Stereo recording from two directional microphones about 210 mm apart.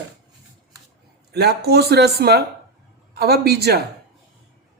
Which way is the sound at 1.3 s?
50° right (ahead or behind).